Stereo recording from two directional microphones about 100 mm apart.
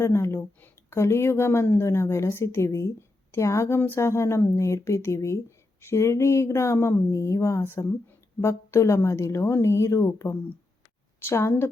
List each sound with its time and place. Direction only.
0.0 s speech: 25° left (ahead or behind)